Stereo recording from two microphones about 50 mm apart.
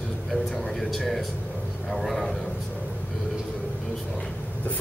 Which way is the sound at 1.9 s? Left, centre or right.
Centre.